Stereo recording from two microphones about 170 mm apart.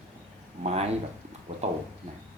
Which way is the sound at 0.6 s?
40° right (ahead or behind).